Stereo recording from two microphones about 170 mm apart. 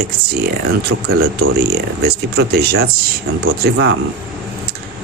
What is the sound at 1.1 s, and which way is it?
Speech, 65° right (ahead or behind).